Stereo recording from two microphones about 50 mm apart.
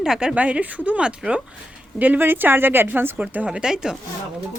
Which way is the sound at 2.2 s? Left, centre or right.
Right.